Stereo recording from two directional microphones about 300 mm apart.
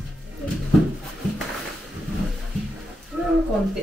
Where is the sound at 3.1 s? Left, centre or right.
Centre.